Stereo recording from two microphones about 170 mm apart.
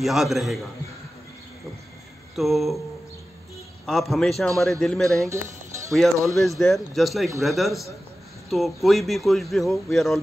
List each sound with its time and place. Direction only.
0.0 s speech: centre (ahead or behind)
2.3 s speech: centre (ahead or behind)
3.8 s speech: centre (ahead or behind)
5.2 s speech: 20° right (ahead or behind)
6.2 s speech: centre (ahead or behind)